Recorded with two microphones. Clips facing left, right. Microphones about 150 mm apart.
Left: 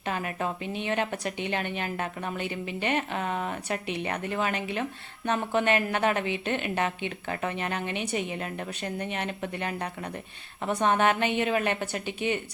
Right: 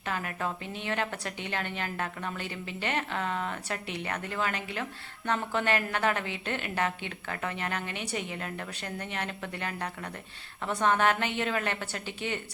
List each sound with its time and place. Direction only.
0.0 s a woman's voice: 20° left (ahead or behind)